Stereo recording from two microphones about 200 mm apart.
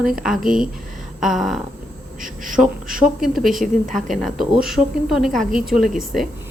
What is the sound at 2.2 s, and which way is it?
Speech, 40° right (ahead or behind).